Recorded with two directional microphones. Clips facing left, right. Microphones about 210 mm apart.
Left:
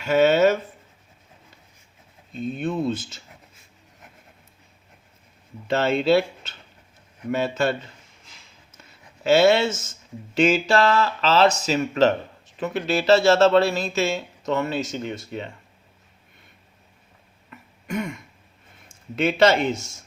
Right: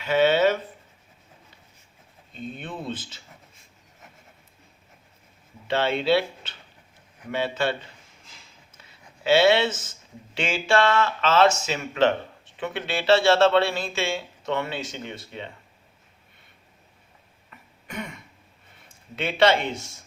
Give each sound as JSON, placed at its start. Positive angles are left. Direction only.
{"t": 0.0, "sound": "speech", "side_deg": 45}
{"t": 2.6, "sound": "speech", "side_deg": 45}
{"t": 5.6, "sound": "speech", "side_deg": 45}
{"t": 8.8, "sound": "a sound", "side_deg": 45}
{"t": 10.3, "sound": "speech", "side_deg": 40}
{"t": 17.8, "sound": "throat clearing", "side_deg": 45}
{"t": 18.9, "sound": "speech", "side_deg": 45}